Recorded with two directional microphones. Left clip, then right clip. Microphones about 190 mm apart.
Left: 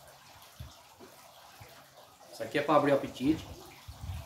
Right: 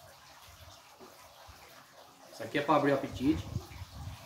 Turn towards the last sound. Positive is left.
turn(degrees=55)  # may be behind; listen again after turning